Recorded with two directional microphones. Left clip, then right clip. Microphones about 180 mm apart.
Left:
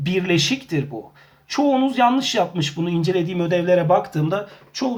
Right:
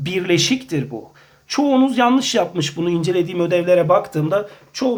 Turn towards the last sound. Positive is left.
turn(degrees=-20)  # may be behind; listen again after turning